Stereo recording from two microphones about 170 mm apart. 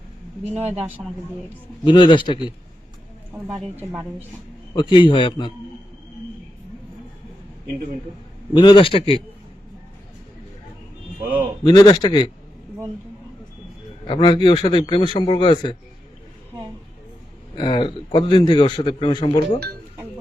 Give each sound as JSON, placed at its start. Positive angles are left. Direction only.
{"t": 1.0, "sound": "a woman's voice", "side_deg": -10}
{"t": 1.8, "sound": "a man's voice", "side_deg": 25}
{"t": 3.3, "sound": "a woman's voice", "side_deg": -5}
{"t": 4.7, "sound": "a man's voice", "side_deg": 30}
{"t": 8.5, "sound": "a man's voice", "side_deg": 30}
{"t": 11.2, "sound": "a sound", "side_deg": -10}
{"t": 11.6, "sound": "a man's voice", "side_deg": 25}
{"t": 14.1, "sound": "a man's voice", "side_deg": 30}
{"t": 17.6, "sound": "a man's voice", "side_deg": 25}